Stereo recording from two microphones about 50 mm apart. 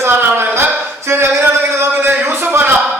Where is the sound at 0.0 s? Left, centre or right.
Right.